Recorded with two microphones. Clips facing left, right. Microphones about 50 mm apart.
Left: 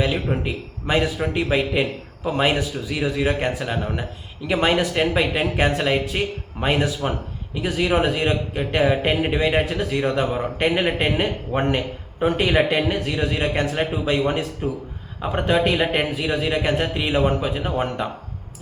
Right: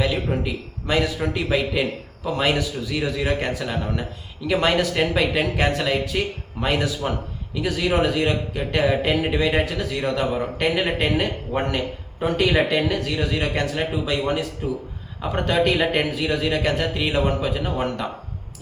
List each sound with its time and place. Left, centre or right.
0.0 s a man's voice: centre
15.2 s speech: centre